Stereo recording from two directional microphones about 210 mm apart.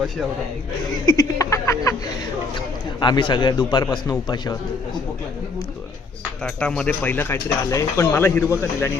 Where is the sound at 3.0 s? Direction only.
20° left (ahead or behind).